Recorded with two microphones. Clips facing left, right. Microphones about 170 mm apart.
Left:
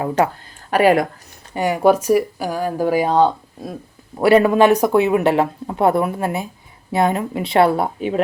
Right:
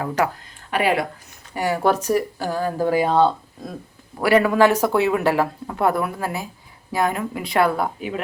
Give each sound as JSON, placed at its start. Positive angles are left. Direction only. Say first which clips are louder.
{"t": 0.7, "sound": "speech", "louder": "left 6 dB", "side_deg": 45}
{"t": 1.5, "sound": "speech", "louder": "left 5 dB", "side_deg": 20}
{"t": 4.2, "sound": "speech", "louder": "left 3 dB", "side_deg": 25}